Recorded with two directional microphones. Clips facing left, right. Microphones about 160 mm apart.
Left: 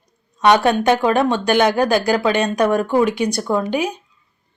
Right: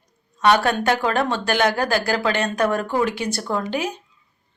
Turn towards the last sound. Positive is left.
turn(degrees=15)  # may be behind; listen again after turning